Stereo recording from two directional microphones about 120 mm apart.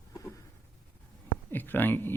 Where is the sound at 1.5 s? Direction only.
15° left (ahead or behind).